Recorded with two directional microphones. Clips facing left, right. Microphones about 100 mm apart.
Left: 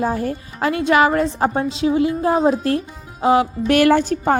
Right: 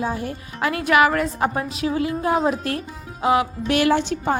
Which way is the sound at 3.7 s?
50° left (ahead or behind).